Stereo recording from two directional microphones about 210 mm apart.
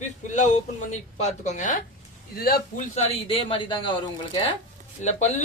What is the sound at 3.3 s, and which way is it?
Speech, 25° left (ahead or behind).